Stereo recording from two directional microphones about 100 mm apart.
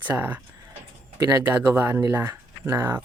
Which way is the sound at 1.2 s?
35° right (ahead or behind).